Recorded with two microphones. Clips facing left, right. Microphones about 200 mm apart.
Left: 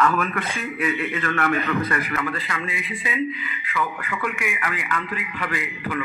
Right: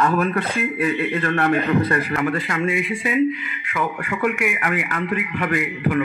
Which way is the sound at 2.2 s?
45° right (ahead or behind).